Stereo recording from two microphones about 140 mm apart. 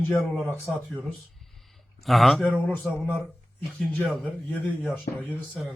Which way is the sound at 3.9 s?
10° left (ahead or behind).